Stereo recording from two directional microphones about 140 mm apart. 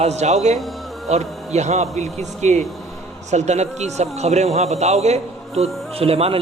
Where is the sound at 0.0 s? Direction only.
55° right (ahead or behind).